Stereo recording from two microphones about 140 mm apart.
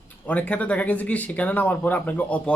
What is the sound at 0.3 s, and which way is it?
Speech, 10° left (ahead or behind).